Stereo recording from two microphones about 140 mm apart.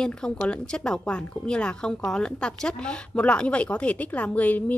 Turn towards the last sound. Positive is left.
turn(degrees=10)  # may be behind; listen again after turning